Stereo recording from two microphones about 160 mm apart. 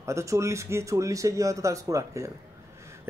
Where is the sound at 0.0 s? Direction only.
20° right (ahead or behind).